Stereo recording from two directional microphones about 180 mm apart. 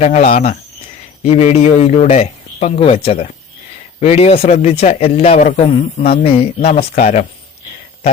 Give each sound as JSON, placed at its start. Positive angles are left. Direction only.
{"t": 0.0, "sound": "a man's voice", "side_deg": 40}